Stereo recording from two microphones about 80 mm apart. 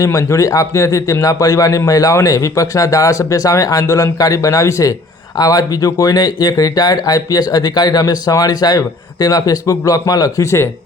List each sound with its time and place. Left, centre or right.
0.0 s speech: left